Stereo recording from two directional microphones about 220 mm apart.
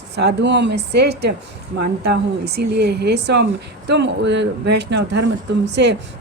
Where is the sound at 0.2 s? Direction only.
50° right (ahead or behind).